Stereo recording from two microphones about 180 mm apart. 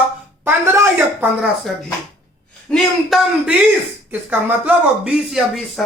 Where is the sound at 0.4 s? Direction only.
15° right (ahead or behind).